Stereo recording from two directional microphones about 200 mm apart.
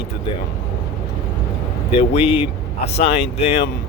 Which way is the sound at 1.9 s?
30° left (ahead or behind).